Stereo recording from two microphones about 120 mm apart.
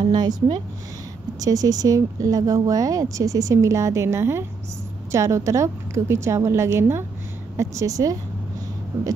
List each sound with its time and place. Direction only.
0.0 s speech: 35° right (ahead or behind)